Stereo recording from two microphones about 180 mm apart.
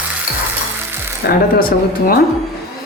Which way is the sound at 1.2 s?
55° left (ahead or behind).